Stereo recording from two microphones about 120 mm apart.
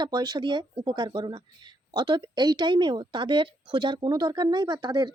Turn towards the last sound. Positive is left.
turn(degrees=-35)  # may be behind; listen again after turning